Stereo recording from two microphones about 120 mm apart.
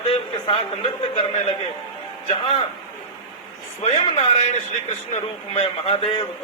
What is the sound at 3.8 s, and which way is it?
Speech, 75° left (ahead or behind).